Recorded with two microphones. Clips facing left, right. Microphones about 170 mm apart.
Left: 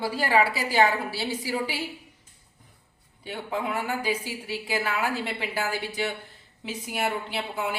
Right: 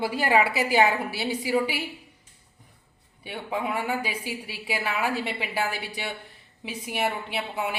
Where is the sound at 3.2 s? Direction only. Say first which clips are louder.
Even; 10° right (ahead or behind).